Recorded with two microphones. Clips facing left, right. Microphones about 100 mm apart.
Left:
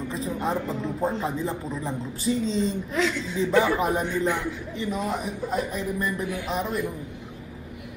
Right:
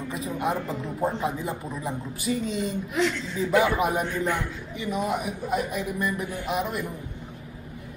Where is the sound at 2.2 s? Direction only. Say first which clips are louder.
Left 3 dB; 30° left (ahead or behind).